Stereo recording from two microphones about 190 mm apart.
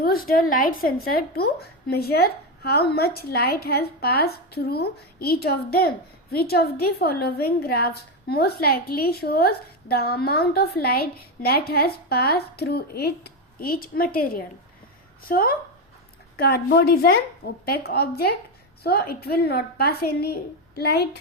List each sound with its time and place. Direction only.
0.0 s a woman's voice: 50° left (ahead or behind)